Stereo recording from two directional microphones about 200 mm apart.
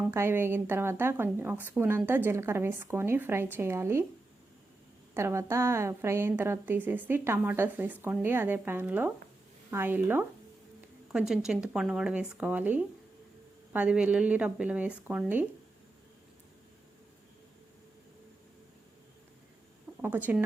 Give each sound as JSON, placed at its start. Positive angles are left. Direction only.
{"t": 0.1, "sound": "a woman's voice", "side_deg": -10}
{"t": 5.1, "sound": "a woman's voice", "side_deg": -15}
{"t": 20.0, "sound": "a woman's voice", "side_deg": -10}